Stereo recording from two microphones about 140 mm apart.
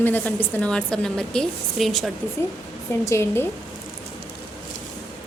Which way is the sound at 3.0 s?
20° left (ahead or behind).